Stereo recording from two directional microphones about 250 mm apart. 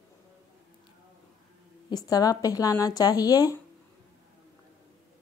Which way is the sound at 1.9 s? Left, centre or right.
Centre.